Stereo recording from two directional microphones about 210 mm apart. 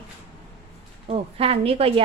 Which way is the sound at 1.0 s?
30° right (ahead or behind).